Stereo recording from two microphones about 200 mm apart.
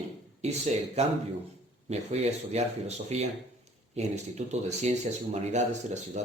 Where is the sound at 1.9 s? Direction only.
35° right (ahead or behind).